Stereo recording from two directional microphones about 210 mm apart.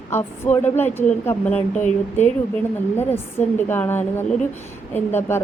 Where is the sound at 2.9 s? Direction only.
10° left (ahead or behind).